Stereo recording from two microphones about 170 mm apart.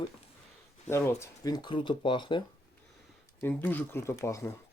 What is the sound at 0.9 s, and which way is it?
Speech, 15° left (ahead or behind).